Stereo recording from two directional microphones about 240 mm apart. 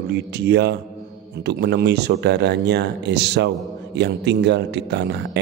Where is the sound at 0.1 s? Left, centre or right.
Right.